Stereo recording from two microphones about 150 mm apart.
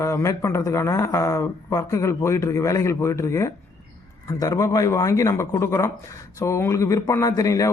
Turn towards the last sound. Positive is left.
turn(degrees=20)  # may be behind; listen again after turning